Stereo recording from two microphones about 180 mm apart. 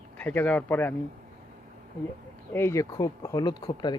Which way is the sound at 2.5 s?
15° left (ahead or behind).